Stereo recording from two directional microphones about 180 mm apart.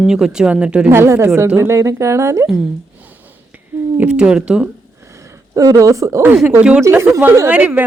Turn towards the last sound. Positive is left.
turn(degrees=-10)  # may be behind; listen again after turning